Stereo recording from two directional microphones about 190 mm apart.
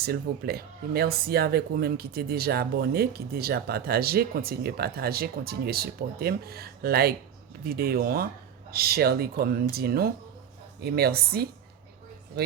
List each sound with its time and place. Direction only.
0.0 s speech: 55° right (ahead or behind)